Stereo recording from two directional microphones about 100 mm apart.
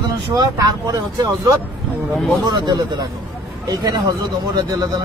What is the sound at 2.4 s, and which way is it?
Speech, 45° right (ahead or behind).